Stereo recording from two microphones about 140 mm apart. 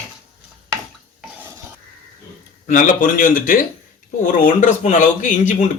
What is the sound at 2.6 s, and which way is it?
Speech, 65° left (ahead or behind).